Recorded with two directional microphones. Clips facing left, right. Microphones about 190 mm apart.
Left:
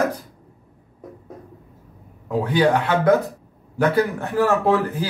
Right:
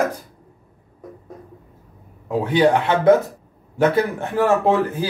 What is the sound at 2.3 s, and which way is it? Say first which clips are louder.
Speech: right 2 dB; 25° right (ahead or behind).